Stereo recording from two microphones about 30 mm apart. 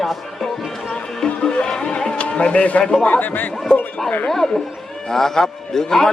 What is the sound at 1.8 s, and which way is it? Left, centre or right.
Livestock, left.